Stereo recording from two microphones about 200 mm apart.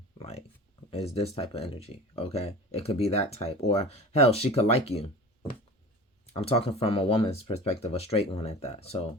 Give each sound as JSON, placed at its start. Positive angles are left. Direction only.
{"t": 0.2, "sound": "a sound", "side_deg": 30}
{"t": 0.9, "sound": "speech", "side_deg": 30}
{"t": 6.3, "sound": "speech", "side_deg": 30}